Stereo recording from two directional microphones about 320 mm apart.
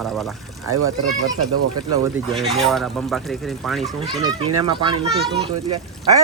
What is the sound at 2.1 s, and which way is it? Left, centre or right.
Speech, centre.